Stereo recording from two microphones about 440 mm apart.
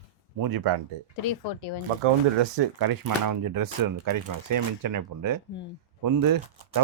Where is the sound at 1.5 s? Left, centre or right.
Left.